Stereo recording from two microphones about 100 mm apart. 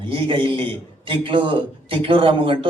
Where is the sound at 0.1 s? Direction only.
60° right (ahead or behind).